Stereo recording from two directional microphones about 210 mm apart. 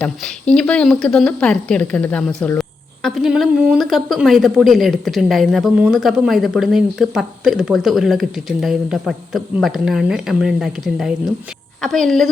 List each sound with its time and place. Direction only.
0.0 s speech: 5° left (ahead or behind)